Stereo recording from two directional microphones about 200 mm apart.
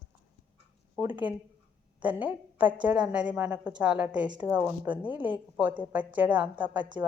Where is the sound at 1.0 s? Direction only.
10° right (ahead or behind).